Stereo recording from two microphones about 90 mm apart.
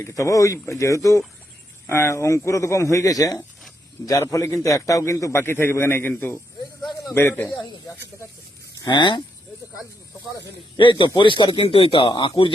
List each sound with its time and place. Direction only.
0.0 s a man's voice: 35° left (ahead or behind)
7.5 s speech: 50° left (ahead or behind)
8.8 s speech: 60° left (ahead or behind)
10.8 s speech: 65° left (ahead or behind)